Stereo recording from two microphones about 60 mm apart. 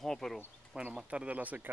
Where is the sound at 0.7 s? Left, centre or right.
Centre.